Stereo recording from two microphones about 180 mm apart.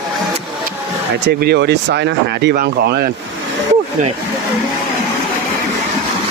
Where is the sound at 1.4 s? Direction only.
65° right (ahead or behind).